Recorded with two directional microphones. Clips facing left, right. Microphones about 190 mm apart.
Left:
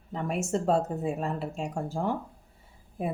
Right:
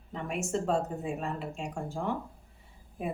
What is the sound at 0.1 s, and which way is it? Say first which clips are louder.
A woman's voice: left 3 dB; 40° left (ahead or behind).